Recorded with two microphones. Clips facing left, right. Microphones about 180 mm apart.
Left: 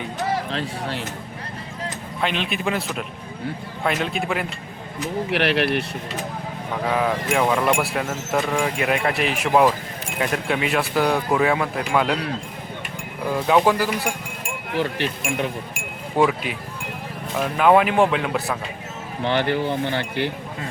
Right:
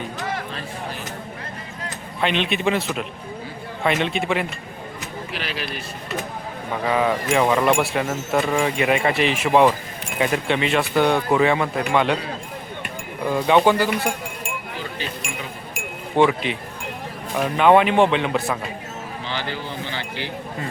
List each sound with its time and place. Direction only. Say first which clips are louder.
0.5 s speech: left 4 dB; 85° left
2.2 s speech: right 3 dB; centre (ahead or behind)
5.3 s speech: left 11 dB; 70° left (ahead or behind)
6.8 s speech: right 2 dB; centre (ahead or behind)
13.3 s speech: right 1 dB; centre (ahead or behind)
14.7 s speech: left 12 dB; 70° left (ahead or behind)
16.1 s speech: right 2 dB; 5° left (ahead or behind)
19.2 s speech: left 10 dB; 60° left (ahead or behind)